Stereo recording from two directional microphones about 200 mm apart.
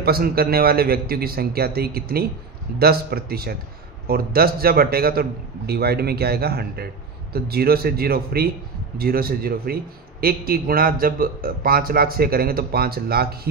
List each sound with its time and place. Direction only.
0.0 s a man's voice: 50° right (ahead or behind)